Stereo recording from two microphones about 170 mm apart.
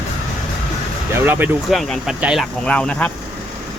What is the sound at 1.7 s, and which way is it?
Speech, centre (ahead or behind).